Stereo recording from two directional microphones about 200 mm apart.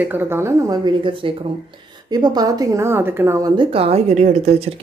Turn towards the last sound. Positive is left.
turn(degrees=-35)  # may be behind; listen again after turning